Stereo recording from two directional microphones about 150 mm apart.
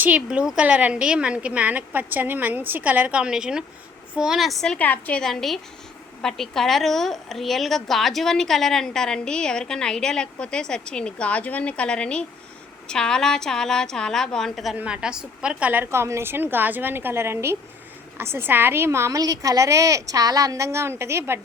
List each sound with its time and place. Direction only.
0.0 s a woman's voice: 10° right (ahead or behind)